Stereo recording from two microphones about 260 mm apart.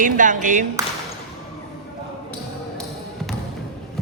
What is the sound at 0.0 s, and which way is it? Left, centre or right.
Speech, right.